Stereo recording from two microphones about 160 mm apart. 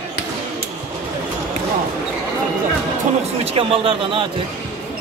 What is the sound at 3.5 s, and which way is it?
Speech, 35° right (ahead or behind).